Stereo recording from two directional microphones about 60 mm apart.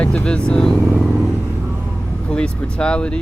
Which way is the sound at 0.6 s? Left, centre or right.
Centre.